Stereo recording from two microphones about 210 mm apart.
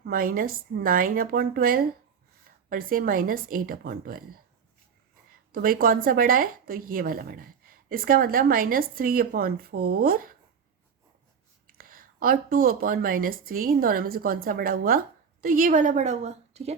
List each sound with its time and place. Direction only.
0.0 s a woman's voice: 45° right (ahead or behind)
5.5 s a woman's voice: 45° right (ahead or behind)
11.8 s a woman's voice: 45° right (ahead or behind)